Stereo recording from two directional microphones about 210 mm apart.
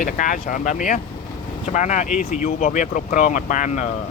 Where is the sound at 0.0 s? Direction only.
40° left (ahead or behind).